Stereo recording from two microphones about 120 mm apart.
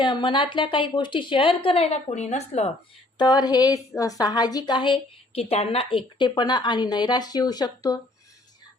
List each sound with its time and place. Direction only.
0.0 s a woman's voice: 40° left (ahead or behind); by 2.6 s 65° left (ahead or behind)
3.2 s a woman's voice: 35° left (ahead or behind)
5.4 s a woman's voice: 60° left (ahead or behind); by 7.9 s 35° left (ahead or behind)